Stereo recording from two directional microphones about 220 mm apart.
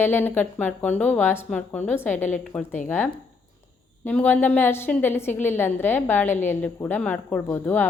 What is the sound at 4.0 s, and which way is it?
Speech, 10° left (ahead or behind).